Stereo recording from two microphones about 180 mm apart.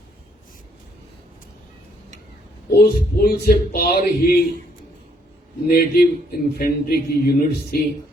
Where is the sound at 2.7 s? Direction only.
60° left (ahead or behind).